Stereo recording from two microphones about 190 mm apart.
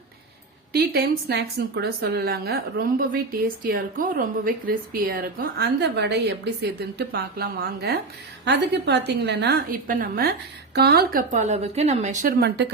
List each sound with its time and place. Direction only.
0.7 s a woman's voice: 55° right (ahead or behind); by 12.3 s 40° right (ahead or behind)
12.4 s a woman's voice: 60° right (ahead or behind)